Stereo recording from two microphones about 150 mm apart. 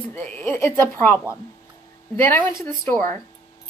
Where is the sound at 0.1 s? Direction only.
15° left (ahead or behind).